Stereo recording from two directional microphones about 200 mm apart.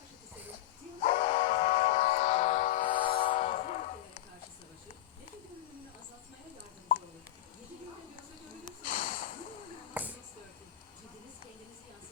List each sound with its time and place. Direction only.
1.0 s steam whistle: 25° left (ahead or behind)
2.9 s train: 25° left (ahead or behind)
8.6 s snort: 25° left (ahead or behind)
9.9 s a sound: 10° right (ahead or behind)